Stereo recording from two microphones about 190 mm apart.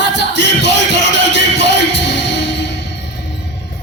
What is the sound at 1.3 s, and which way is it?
Music, 65° left (ahead or behind).